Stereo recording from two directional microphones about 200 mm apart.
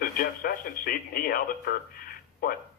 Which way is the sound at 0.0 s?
45° left (ahead or behind).